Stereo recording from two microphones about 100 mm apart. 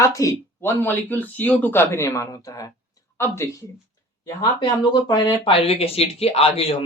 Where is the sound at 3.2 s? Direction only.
25° left (ahead or behind).